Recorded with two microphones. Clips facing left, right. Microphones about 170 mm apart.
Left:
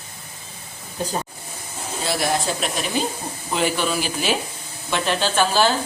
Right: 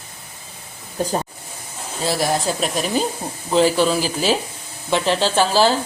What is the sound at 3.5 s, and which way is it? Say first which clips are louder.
Speech: right 6 dB; 30° right (ahead or behind).